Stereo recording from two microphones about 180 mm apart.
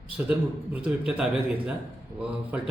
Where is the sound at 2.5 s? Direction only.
10° right (ahead or behind).